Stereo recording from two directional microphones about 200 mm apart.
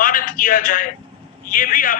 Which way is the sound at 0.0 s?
45° left (ahead or behind).